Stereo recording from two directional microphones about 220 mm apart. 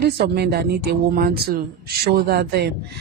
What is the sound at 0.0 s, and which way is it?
Speech, 50° right (ahead or behind).